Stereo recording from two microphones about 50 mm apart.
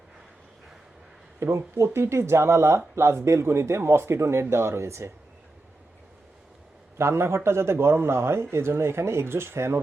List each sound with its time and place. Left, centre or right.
1.4 s speech: right
7.0 s speech: right